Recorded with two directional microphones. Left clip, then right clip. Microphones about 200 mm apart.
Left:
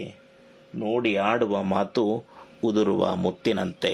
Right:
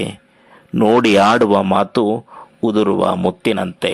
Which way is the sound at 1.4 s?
25° right (ahead or behind).